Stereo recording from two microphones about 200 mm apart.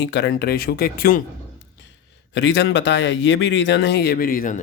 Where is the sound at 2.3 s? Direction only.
60° left (ahead or behind).